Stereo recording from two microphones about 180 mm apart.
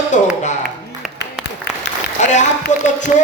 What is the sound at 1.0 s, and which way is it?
Applause, centre (ahead or behind).